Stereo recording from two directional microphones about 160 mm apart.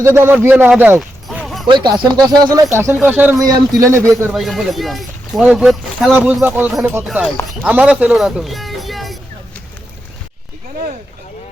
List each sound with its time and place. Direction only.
0.0 s speech: 15° right (ahead or behind)
0.7 s a sound: 10° right (ahead or behind)
1.6 s speech: 30° right (ahead or behind)
4.3 s speech: centre (ahead or behind)